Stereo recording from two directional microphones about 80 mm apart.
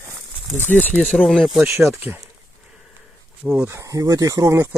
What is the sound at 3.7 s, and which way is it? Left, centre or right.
Speech, right.